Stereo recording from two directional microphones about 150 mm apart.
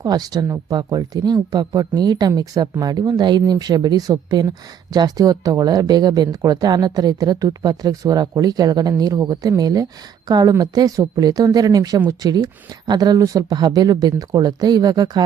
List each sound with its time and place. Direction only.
0.0 s speech: 25° right (ahead or behind)